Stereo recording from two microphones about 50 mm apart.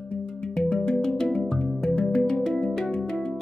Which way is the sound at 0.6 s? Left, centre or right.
Centre.